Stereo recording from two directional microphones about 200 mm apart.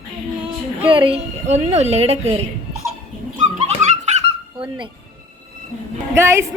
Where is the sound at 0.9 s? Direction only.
25° right (ahead or behind).